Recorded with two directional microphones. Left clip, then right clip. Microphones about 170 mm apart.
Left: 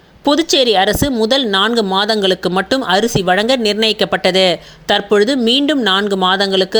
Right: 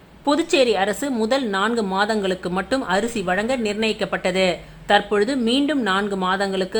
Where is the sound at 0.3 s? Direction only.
30° left (ahead or behind).